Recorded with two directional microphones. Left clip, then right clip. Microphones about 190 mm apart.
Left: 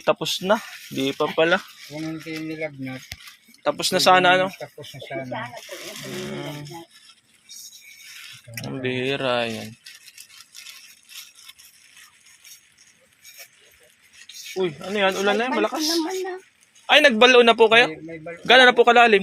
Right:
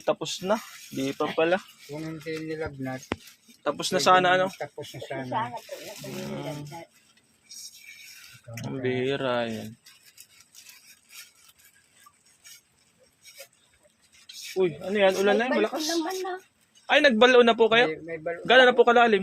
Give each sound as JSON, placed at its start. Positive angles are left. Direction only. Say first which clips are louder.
{"t": 0.0, "sound": "speech", "louder": "left 6 dB", "side_deg": 25}
{"t": 3.6, "sound": "a man's voice", "louder": "left 5 dB", "side_deg": 15}
{"t": 6.3, "sound": "speech", "louder": "left 2 dB", "side_deg": 5}
{"t": 8.5, "sound": "a man's voice", "louder": "left 2 dB", "side_deg": 5}
{"t": 14.5, "sound": "a man's voice", "louder": "left 1 dB", "side_deg": 0}